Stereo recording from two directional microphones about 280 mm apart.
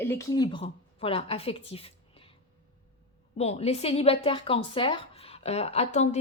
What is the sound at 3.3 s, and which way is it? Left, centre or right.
A woman's voice, left.